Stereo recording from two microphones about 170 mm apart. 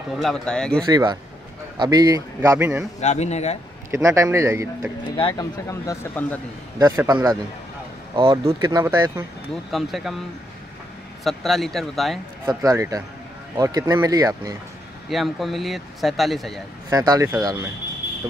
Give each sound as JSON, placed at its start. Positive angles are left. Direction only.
{"t": 0.1, "sound": "speech", "side_deg": 0}
{"t": 0.8, "sound": "speech", "side_deg": -25}
{"t": 3.0, "sound": "speech", "side_deg": 40}
{"t": 3.9, "sound": "speech", "side_deg": -15}
{"t": 5.1, "sound": "speech", "side_deg": 25}
{"t": 7.0, "sound": "speech", "side_deg": -20}
{"t": 9.7, "sound": "speech", "side_deg": 0}
{"t": 11.2, "sound": "speech", "side_deg": 0}
{"t": 12.4, "sound": "speech", "side_deg": -20}
{"t": 15.0, "sound": "speech", "side_deg": 0}
{"t": 16.9, "sound": "speech", "side_deg": -20}
{"t": 18.0, "sound": "music", "side_deg": 80}